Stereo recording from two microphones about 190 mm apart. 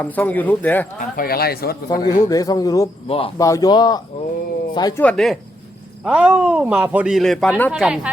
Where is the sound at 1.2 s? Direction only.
50° left (ahead or behind).